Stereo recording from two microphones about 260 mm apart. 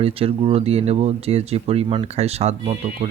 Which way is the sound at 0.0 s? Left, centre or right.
Right.